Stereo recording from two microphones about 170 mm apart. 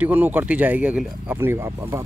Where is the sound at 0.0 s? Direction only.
10° right (ahead or behind).